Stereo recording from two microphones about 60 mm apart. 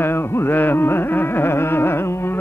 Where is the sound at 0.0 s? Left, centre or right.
Left.